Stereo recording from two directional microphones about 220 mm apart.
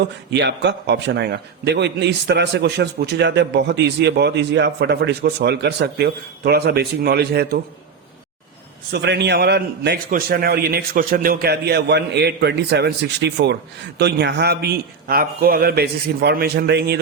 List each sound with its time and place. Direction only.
0.3 s a man's voice: 50° right (ahead or behind)
8.9 s a man's voice: 50° right (ahead or behind)